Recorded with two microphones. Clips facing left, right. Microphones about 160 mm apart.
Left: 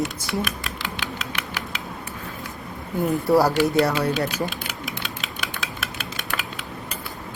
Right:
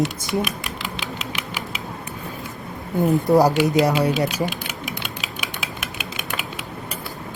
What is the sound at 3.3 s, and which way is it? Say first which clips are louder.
Speech: right 1 dB; 15° right (ahead or behind).